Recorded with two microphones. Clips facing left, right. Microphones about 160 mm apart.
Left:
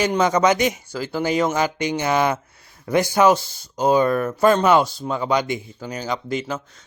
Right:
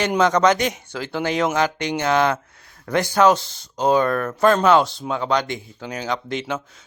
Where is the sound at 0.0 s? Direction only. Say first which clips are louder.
Right 1 dB; 5° left (ahead or behind).